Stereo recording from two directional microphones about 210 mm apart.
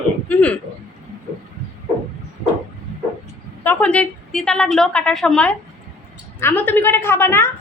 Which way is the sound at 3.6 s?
5° left (ahead or behind).